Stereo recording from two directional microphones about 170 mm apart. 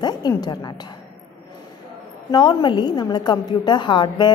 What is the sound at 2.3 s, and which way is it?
A woman's voice, 25° left (ahead or behind).